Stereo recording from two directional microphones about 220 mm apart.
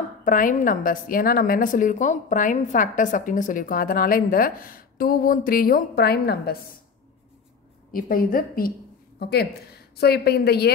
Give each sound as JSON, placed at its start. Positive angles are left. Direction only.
{"t": 0.2, "sound": "a woman's voice", "side_deg": 35}
{"t": 7.9, "sound": "a woman's voice", "side_deg": 40}